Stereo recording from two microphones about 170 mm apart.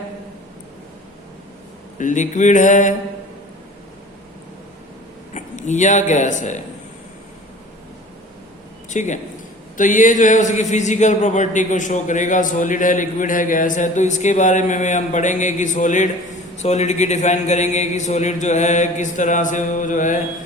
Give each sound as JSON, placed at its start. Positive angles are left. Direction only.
{"t": 2.0, "sound": "speech", "side_deg": 45}
{"t": 5.3, "sound": "speech", "side_deg": 45}
{"t": 8.9, "sound": "a man's voice", "side_deg": 45}